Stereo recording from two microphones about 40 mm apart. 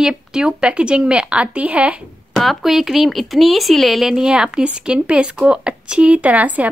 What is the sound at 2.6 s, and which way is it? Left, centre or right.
Speech, centre.